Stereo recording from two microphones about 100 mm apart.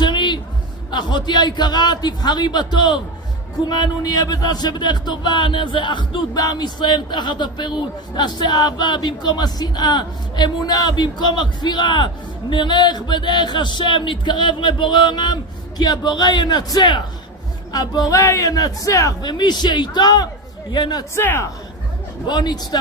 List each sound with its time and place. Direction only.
0.0 s a sound: 50° left (ahead or behind)
0.9 s a man's voice: 50° left (ahead or behind); by 19.3 s 35° left (ahead or behind)
19.3 s speech: 45° left (ahead or behind)
21.1 s speech: 25° left (ahead or behind)
22.2 s speech: 45° left (ahead or behind)